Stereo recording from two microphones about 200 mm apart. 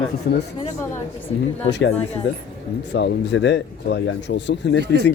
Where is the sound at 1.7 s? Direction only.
60° left (ahead or behind).